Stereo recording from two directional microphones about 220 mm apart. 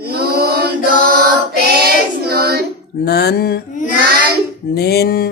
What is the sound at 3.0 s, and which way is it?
Mantra, 45° left (ahead or behind).